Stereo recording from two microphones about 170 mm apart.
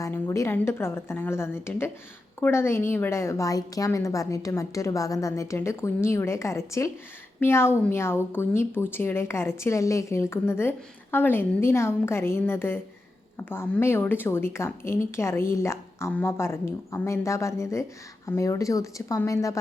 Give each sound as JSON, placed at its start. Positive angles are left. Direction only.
{"t": 0.0, "sound": "speech", "side_deg": 20}